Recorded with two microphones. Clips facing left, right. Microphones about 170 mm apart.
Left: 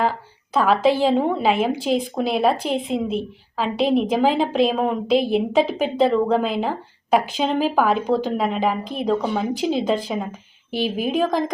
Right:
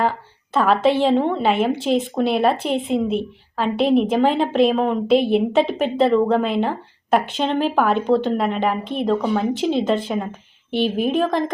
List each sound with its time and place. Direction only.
0.5 s a woman's voice: centre (ahead or behind)